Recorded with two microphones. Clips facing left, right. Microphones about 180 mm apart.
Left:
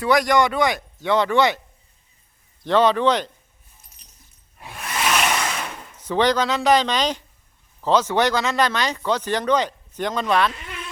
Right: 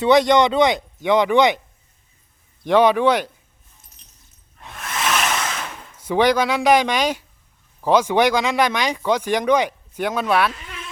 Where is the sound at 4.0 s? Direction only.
Centre (ahead or behind).